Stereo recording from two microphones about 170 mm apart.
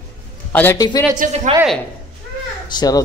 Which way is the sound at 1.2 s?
50° right (ahead or behind).